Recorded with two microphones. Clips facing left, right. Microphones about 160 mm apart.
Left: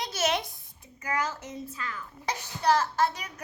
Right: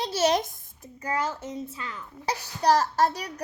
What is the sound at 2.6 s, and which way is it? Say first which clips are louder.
Speech: right 3 dB; 40° right (ahead or behind).